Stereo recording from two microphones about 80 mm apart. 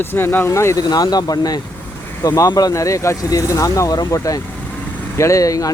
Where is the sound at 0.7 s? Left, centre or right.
Left.